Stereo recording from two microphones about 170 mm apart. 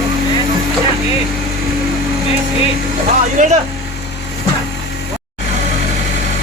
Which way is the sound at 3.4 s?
50° right (ahead or behind).